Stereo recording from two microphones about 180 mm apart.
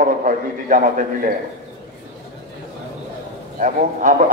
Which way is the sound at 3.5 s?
45° right (ahead or behind).